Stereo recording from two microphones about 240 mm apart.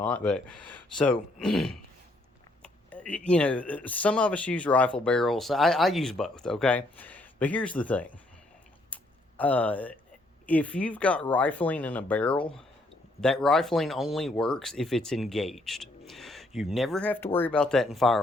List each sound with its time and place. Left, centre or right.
0.0 s speech: centre
8.9 s a sound: centre
9.4 s speech: centre